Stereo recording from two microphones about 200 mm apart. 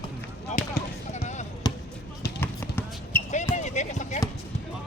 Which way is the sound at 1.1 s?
35° left (ahead or behind).